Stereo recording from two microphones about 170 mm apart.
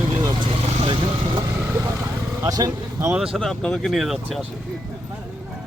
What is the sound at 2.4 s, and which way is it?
Speech, 20° right (ahead or behind).